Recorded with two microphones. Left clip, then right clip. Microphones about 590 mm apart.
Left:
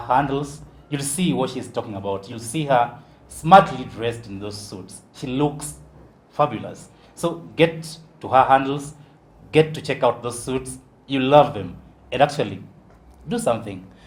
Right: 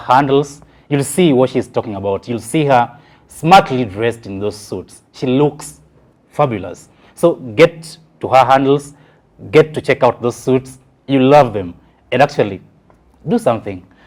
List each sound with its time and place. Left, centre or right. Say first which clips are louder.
0.1 s speech: right 9 dB; right